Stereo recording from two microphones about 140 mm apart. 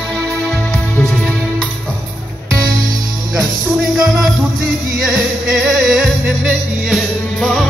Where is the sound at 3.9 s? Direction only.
5° right (ahead or behind).